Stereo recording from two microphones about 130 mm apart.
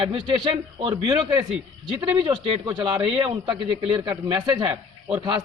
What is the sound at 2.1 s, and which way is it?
A man's voice, 40° right (ahead or behind).